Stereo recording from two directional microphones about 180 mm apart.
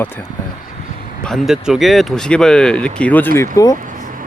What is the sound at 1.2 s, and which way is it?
Speech, centre (ahead or behind).